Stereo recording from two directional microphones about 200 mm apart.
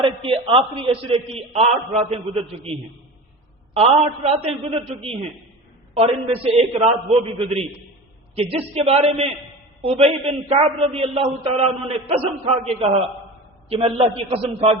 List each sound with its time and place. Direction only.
0.0 s a man's voice: 25° right (ahead or behind)
3.8 s a man's voice: 30° right (ahead or behind)